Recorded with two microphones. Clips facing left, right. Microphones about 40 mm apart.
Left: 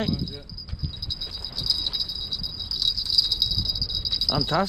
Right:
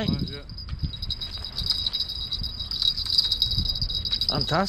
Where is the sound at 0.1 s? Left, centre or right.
Right.